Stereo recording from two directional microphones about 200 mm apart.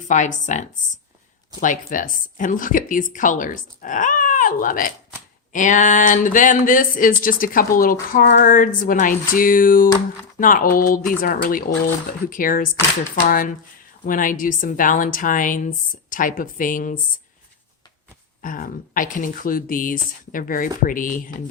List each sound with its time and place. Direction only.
0.1 s a woman's voice: 40° left (ahead or behind)
18.4 s speech: 45° left (ahead or behind)